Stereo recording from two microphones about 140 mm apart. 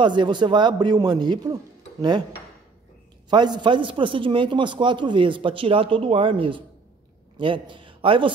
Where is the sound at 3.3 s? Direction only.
30° right (ahead or behind).